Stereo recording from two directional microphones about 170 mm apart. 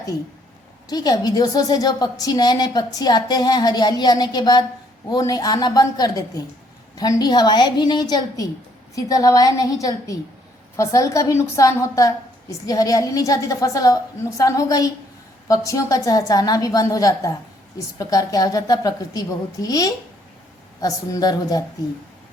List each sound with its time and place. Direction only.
0.9 s a woman's voice: 20° left (ahead or behind)
10.8 s a woman's voice: 20° left (ahead or behind)